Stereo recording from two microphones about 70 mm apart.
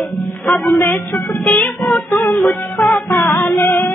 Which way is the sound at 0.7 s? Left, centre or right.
Left.